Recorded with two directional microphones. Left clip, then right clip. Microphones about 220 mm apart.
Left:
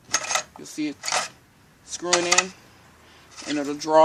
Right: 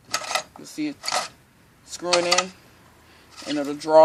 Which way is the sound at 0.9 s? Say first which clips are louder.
Even; centre (ahead or behind).